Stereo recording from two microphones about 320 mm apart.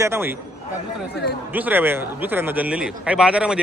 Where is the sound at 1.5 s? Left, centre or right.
Centre.